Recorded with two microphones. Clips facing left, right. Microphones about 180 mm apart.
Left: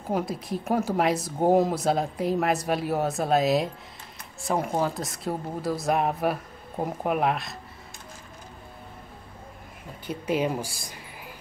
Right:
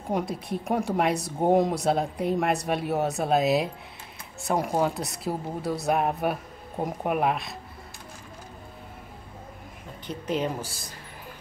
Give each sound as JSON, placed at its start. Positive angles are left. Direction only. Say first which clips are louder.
{"t": 0.0, "sound": "speech", "louder": "even", "side_deg": 0}
{"t": 10.0, "sound": "speech", "louder": "left 2 dB", "side_deg": 10}